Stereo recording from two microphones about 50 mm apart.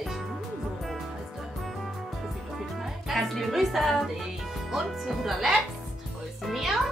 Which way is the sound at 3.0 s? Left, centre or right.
Centre.